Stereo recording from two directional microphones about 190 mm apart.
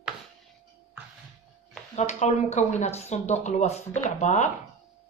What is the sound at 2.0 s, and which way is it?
Speech, 35° left (ahead or behind).